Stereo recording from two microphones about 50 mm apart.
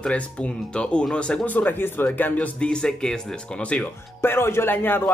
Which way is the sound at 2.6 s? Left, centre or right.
Centre.